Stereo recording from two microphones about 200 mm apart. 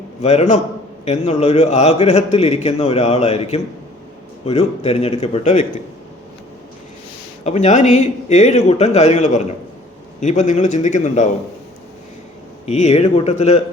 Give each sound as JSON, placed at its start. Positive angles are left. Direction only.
{"t": 0.2, "sound": "a man's voice", "side_deg": 35}
{"t": 7.4, "sound": "a man's voice", "side_deg": 35}
{"t": 12.6, "sound": "a man's voice", "side_deg": 35}